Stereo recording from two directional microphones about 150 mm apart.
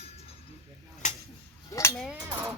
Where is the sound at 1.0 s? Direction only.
55° left (ahead or behind).